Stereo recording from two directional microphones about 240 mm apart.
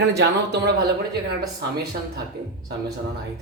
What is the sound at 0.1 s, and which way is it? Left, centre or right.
Speech, right.